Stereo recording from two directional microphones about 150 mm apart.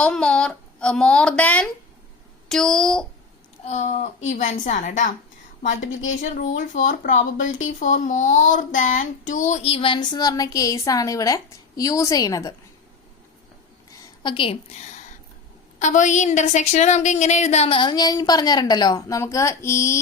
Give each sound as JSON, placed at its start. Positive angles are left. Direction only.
{"t": 0.0, "sound": "speech", "side_deg": 5}
{"t": 3.7, "sound": "a woman's voice", "side_deg": 50}
{"t": 9.6, "sound": "a woman's voice", "side_deg": 40}
{"t": 14.2, "sound": "a woman's voice", "side_deg": 35}
{"t": 15.8, "sound": "a woman's voice", "side_deg": 55}